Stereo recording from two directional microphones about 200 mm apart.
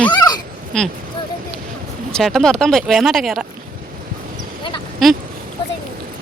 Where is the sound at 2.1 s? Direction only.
Centre (ahead or behind).